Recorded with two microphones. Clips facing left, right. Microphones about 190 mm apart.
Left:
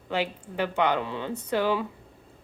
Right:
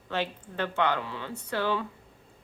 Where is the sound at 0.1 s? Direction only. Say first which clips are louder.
Left 3 dB; 10° left (ahead or behind).